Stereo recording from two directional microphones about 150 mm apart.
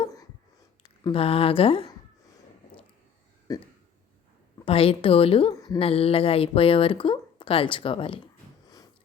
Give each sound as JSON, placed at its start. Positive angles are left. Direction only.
{"t": 1.1, "sound": "speech", "side_deg": 40}
{"t": 3.5, "sound": "speech", "side_deg": 25}
{"t": 4.6, "sound": "speech", "side_deg": 40}
{"t": 5.5, "sound": "a woman's voice", "side_deg": 25}
{"t": 5.8, "sound": "speech", "side_deg": 40}
{"t": 8.6, "sound": "snort", "side_deg": 25}